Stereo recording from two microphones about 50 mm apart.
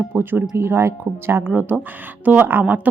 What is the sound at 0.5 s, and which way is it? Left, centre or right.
Speech, right.